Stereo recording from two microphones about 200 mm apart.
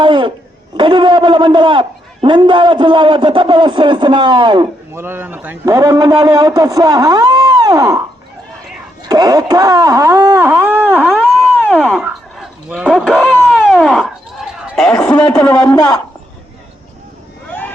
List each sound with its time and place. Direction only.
0.0 s cough: 25° right (ahead or behind)
0.8 s a man's voice: 25° right (ahead or behind)
4.9 s a man's voice: 10° right (ahead or behind)
9.0 s wail: 20° right (ahead or behind); by 15.5 s 5° left (ahead or behind)
15.7 s a man's voice: 20° left (ahead or behind)
17.5 s vehicle: 10° left (ahead or behind)